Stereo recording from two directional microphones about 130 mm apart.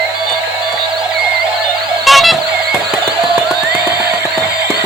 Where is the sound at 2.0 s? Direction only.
Centre (ahead or behind).